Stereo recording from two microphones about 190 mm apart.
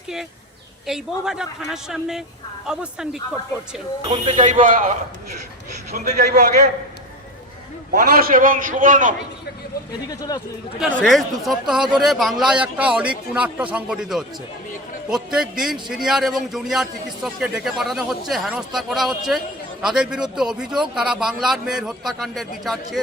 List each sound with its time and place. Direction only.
0.9 s a man's voice: centre (ahead or behind)
4.1 s a man's voice: 40° right (ahead or behind)
7.9 s a man's voice: 45° right (ahead or behind)
10.1 s speech: 20° left (ahead or behind)
10.8 s a man's voice: centre (ahead or behind)